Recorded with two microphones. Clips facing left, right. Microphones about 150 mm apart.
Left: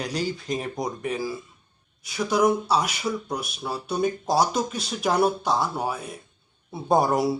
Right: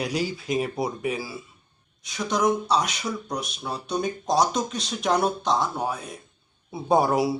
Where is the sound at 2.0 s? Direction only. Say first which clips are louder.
Left 2 dB; 5° left (ahead or behind).